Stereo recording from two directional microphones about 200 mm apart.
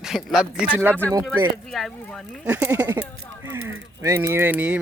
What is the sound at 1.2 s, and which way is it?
Speech, centre (ahead or behind).